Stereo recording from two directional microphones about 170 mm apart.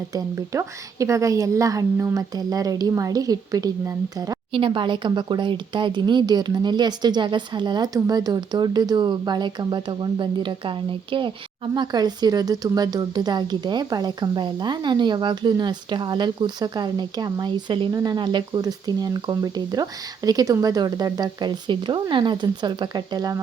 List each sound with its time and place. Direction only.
0.1 s speech: 20° right (ahead or behind)